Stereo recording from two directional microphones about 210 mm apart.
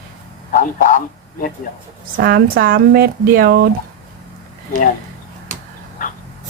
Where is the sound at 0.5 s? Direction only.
40° left (ahead or behind).